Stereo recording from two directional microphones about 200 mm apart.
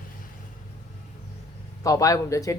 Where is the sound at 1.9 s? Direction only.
15° left (ahead or behind).